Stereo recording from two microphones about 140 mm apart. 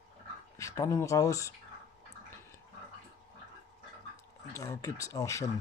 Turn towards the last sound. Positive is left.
turn(degrees=25)  # may be behind; listen again after turning